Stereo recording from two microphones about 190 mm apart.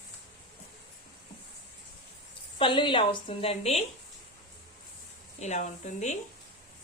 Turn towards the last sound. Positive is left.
turn(degrees=40)  # may be behind; listen again after turning